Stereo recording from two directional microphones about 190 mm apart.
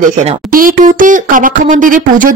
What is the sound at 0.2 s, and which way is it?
Speech, 45° right (ahead or behind).